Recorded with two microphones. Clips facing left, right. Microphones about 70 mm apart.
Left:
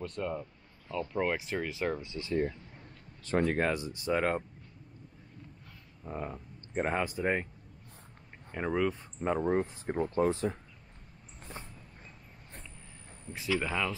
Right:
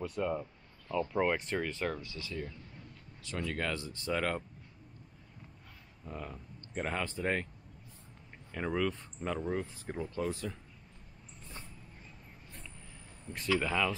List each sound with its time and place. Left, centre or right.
0.0 s speech: centre
2.0 s speech: left
2.4 s a sound: left
3.5 s speech: left
6.0 s speech: left
8.5 s speech: centre
9.4 s speech: left
13.3 s speech: centre